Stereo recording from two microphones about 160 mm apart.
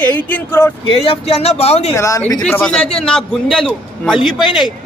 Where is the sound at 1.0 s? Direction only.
35° left (ahead or behind).